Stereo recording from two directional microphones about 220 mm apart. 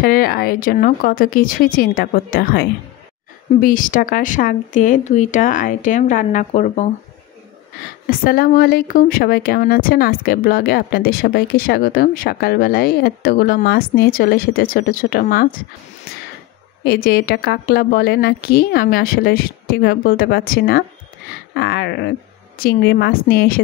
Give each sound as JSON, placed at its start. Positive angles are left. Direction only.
{"t": 0.0, "sound": "speech", "side_deg": 40}
{"t": 8.1, "sound": "speech", "side_deg": 40}
{"t": 16.8, "sound": "speech", "side_deg": 45}